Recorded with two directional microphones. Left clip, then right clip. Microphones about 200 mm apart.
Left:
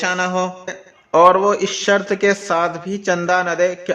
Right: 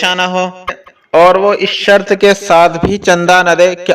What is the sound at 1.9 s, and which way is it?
A man's voice, 40° right (ahead or behind).